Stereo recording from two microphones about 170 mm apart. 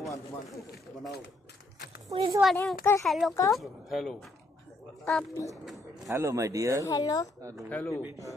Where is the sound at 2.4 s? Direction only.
5° right (ahead or behind).